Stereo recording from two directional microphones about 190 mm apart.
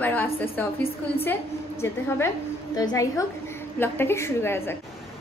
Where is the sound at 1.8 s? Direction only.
15° left (ahead or behind).